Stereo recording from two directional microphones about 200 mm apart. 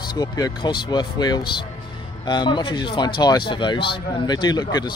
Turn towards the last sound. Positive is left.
turn(degrees=20)  # may be behind; listen again after turning